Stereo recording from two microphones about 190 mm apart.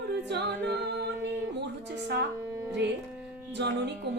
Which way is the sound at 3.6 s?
65° right (ahead or behind).